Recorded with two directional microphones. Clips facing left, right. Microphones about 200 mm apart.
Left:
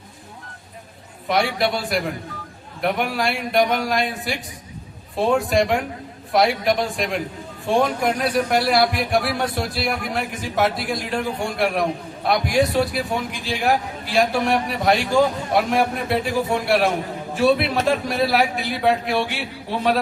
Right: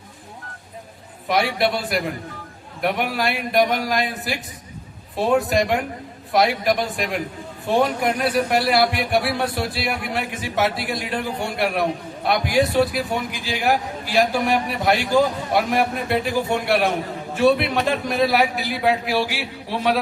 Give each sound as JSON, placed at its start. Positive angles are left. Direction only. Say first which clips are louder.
{"t": 1.3, "sound": "speech", "louder": "even", "side_deg": 0}
{"t": 5.5, "sound": "speech", "louder": "left 1 dB", "side_deg": 0}
{"t": 6.9, "sound": "speech", "louder": "left 1 dB", "side_deg": -5}